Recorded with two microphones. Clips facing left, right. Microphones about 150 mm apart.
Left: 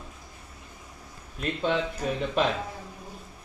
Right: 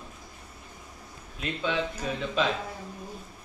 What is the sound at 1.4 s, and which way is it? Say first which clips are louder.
Speech: left 4 dB; 45° left (ahead or behind).